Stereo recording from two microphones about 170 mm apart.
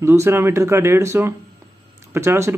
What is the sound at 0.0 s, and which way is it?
A man's voice, 15° right (ahead or behind).